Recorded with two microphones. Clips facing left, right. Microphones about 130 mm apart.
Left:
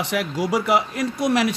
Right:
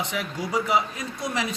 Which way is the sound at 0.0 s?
75° left (ahead or behind).